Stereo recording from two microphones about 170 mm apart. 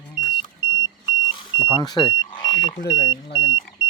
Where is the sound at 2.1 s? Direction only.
30° left (ahead or behind).